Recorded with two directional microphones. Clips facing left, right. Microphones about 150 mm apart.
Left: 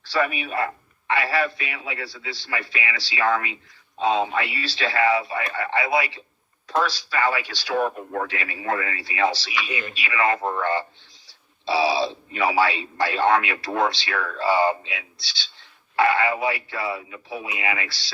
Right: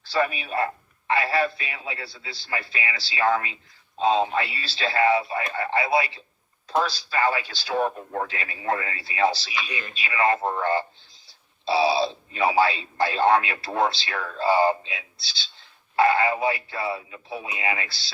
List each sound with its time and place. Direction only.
0.1 s a man's voice: 35° right (ahead or behind)